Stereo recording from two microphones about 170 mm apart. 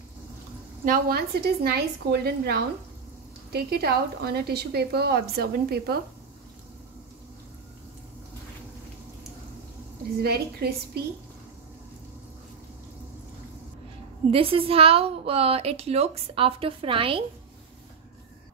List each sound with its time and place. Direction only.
0.8 s a woman's voice: 60° right (ahead or behind)
10.2 s a woman's voice: 70° right (ahead or behind)
14.3 s a woman's voice: 35° right (ahead or behind)